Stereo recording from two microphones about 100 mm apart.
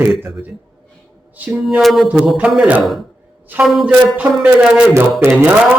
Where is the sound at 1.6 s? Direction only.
Centre (ahead or behind).